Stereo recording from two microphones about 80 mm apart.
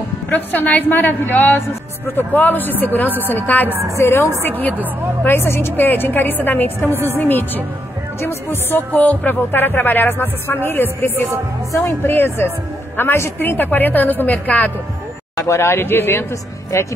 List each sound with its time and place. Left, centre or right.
0.3 s music: left
3.9 s speech: left
4.4 s music: left
6.9 s a woman's voice: right
7.2 s music: left
15.3 s speech: left